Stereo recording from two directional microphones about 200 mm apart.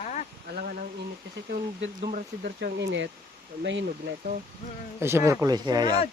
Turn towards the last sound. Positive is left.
turn(degrees=-20)  # may be behind; listen again after turning